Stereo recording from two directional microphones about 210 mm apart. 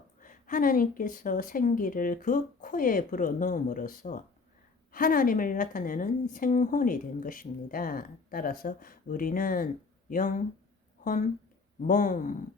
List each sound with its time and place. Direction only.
0.2 s speech: 40° left (ahead or behind)